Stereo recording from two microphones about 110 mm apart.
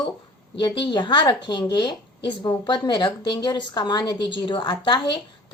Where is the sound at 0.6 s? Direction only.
45° left (ahead or behind).